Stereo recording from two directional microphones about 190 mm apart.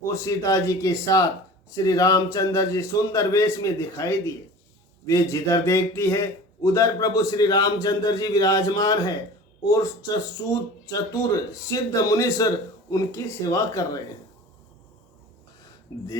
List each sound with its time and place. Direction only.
0.0 s speech: 15° left (ahead or behind)
15.9 s speech: 20° left (ahead or behind)